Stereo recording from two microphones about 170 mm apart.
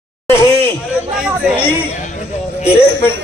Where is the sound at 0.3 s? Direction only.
15° left (ahead or behind).